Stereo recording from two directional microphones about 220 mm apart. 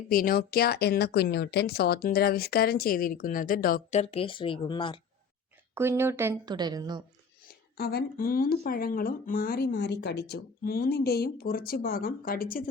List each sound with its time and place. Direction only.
0.1 s speech: 40° left (ahead or behind)
4.0 s speech: 25° left (ahead or behind)
5.7 s speech: 10° right (ahead or behind)
7.8 s speech: 45° left (ahead or behind)